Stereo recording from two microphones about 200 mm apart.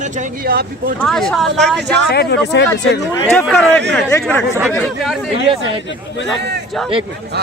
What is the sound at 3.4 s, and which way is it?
Speech, 5° left (ahead or behind).